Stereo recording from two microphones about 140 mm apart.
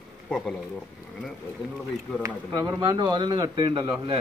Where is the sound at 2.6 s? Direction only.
30° right (ahead or behind).